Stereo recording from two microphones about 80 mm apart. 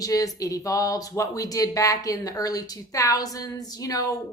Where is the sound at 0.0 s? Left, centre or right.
Left.